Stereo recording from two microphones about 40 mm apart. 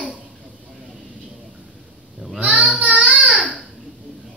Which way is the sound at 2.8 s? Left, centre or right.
Right.